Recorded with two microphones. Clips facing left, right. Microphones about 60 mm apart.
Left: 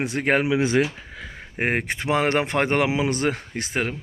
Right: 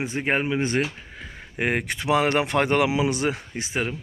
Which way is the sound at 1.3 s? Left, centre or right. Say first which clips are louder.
Left 1 dB; left.